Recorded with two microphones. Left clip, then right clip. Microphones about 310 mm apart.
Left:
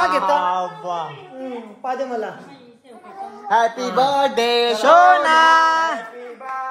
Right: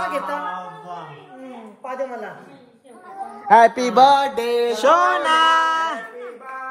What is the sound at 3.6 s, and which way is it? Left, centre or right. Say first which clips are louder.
Music: right 4 dB; right.